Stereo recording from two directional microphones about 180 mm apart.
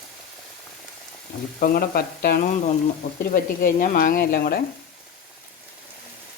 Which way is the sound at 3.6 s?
55° left (ahead or behind).